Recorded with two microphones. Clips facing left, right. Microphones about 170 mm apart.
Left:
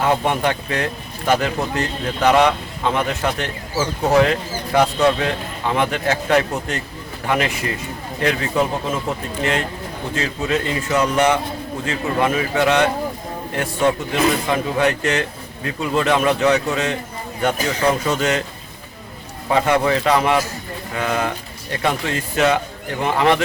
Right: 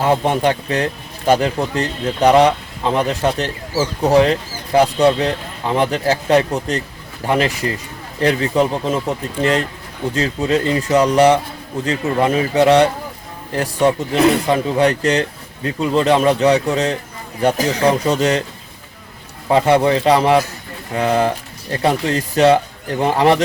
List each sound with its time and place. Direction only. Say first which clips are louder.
0.0 s speech: right 3 dB; 30° right (ahead or behind)
19.5 s speech: right 4 dB; 30° right (ahead or behind)